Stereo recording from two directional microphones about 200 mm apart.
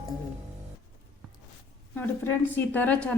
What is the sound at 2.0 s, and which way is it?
A woman's voice, 10° left (ahead or behind).